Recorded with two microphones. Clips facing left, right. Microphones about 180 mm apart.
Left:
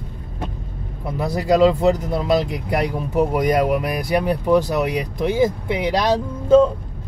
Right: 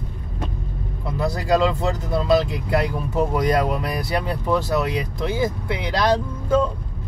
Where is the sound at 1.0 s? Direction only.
20° left (ahead or behind).